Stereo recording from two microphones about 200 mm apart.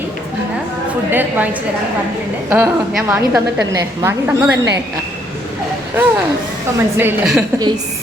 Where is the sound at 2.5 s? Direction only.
10° right (ahead or behind).